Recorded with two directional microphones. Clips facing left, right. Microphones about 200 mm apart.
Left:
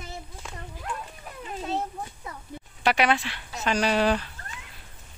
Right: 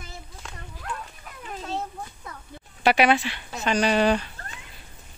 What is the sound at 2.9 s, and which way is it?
Speech, 10° right (ahead or behind).